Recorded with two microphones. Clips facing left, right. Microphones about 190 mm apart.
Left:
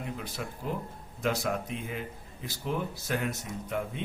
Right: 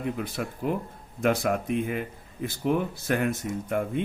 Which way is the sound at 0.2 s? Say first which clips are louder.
Right 7 dB; 60° right (ahead or behind).